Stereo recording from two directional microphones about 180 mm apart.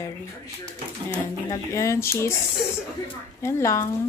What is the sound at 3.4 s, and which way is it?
Speech, 15° left (ahead or behind).